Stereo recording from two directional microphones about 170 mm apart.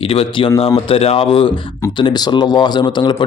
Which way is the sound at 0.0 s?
35° left (ahead or behind).